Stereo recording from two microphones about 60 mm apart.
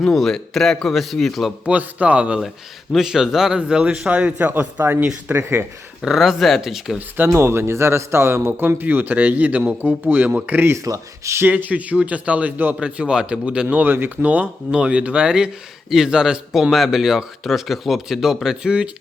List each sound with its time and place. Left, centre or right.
0.0 s a man's voice: centre
1.6 s a man's voice: right
2.9 s speech: centre
4.1 s a man's voice: right
6.1 s a man's voice: centre
7.3 s speech: right
10.8 s speech: right
11.4 s a man's voice: right
12.8 s a man's voice: centre
13.8 s speech: right; by 18.9 s centre